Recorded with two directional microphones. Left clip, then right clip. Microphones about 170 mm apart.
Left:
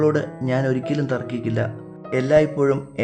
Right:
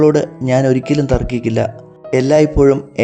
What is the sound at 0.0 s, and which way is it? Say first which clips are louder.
Speech: right 8 dB; 30° right (ahead or behind).